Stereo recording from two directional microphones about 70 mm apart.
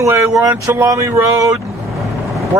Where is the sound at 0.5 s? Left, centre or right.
Right.